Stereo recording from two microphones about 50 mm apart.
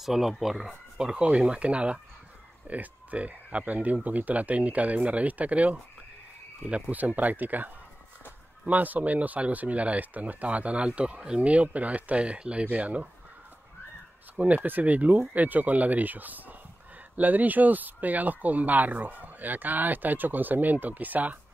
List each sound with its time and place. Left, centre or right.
0.0 s speech: centre
1.0 s speech: centre
14.3 s speech: right